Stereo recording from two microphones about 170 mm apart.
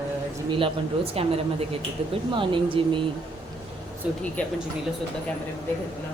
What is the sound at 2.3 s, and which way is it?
Speech, 30° right (ahead or behind).